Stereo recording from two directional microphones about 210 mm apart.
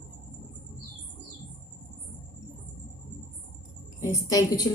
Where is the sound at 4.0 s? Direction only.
15° left (ahead or behind).